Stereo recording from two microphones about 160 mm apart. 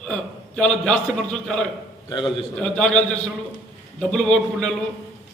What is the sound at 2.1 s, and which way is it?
Speech, 30° left (ahead or behind).